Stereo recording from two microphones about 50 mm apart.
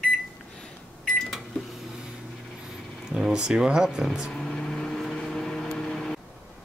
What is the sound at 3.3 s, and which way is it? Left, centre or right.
Speech, centre.